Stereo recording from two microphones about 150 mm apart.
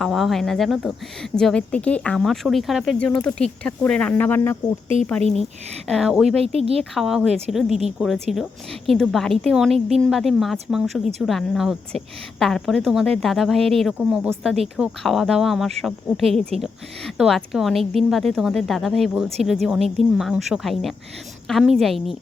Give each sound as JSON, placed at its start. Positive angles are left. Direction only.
{"t": 0.0, "sound": "a woman's voice", "side_deg": 0}
{"t": 5.9, "sound": "a woman's voice", "side_deg": -5}
{"t": 6.4, "sound": "speech", "side_deg": -40}
{"t": 6.9, "sound": "a woman's voice", "side_deg": 0}